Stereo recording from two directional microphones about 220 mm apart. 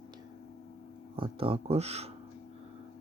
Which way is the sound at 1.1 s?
25° right (ahead or behind).